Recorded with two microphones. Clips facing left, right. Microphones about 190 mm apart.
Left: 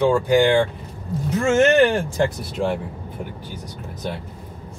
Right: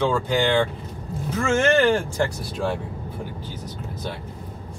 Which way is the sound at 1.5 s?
15° left (ahead or behind).